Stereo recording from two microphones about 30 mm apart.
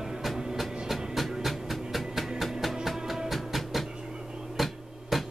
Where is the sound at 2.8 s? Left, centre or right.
Centre.